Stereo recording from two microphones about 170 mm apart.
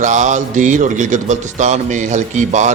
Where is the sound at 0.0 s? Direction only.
45° right (ahead or behind).